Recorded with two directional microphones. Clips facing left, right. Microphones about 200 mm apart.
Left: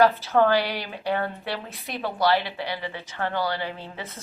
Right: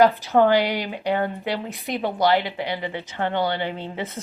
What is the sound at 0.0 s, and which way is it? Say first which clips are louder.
A woman's voice: right 3 dB; 15° right (ahead or behind).